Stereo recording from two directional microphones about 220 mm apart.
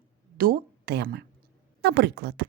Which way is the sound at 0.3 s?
40° right (ahead or behind).